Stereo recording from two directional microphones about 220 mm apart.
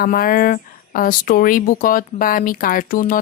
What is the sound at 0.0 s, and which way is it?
Speech, 40° left (ahead or behind).